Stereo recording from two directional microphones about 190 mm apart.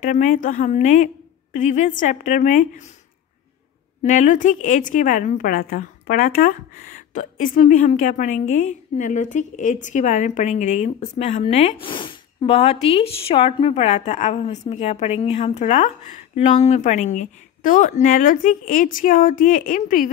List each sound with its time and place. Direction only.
0.0 s a woman's voice: 40° left (ahead or behind)
4.0 s a woman's voice: 40° left (ahead or behind)